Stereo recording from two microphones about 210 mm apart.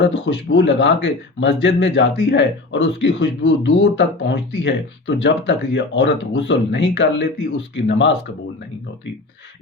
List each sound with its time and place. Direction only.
0.0 s speech: 60° left (ahead or behind)